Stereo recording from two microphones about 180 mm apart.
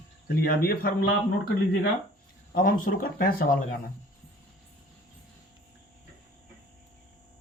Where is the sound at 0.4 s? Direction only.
55° left (ahead or behind).